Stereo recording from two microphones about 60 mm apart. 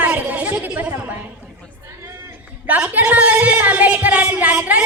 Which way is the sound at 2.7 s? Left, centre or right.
Right.